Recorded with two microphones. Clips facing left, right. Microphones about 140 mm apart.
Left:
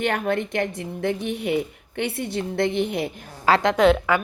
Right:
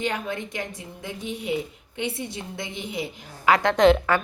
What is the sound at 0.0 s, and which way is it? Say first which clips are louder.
A woman's voice: left 5 dB; 65° left (ahead or behind).